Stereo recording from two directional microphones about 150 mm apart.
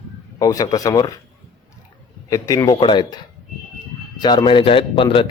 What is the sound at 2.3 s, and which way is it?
Speech, 20° left (ahead or behind).